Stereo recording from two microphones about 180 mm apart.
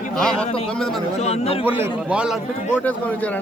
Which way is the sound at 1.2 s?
35° left (ahead or behind).